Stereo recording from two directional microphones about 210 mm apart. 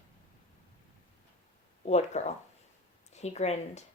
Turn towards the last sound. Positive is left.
turn(degrees=30)  # may be behind; listen again after turning